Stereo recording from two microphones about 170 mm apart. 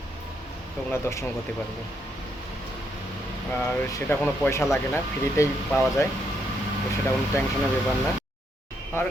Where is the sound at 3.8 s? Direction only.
15° left (ahead or behind).